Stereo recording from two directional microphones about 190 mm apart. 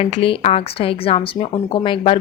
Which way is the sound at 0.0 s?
30° left (ahead or behind).